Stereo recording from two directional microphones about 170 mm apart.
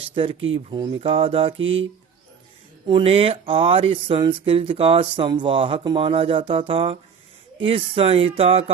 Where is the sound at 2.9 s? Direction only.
30° right (ahead or behind).